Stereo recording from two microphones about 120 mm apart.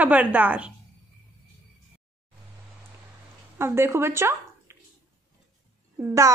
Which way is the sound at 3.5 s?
20° right (ahead or behind).